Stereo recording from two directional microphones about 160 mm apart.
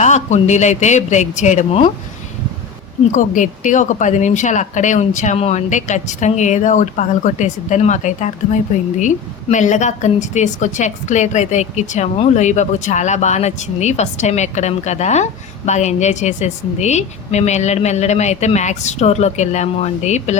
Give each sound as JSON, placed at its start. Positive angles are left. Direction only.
{"t": 0.0, "sound": "speech", "side_deg": 50}
{"t": 3.1, "sound": "speech", "side_deg": 55}